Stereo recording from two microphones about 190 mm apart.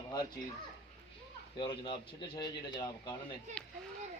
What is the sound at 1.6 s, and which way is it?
Speech, 25° left (ahead or behind).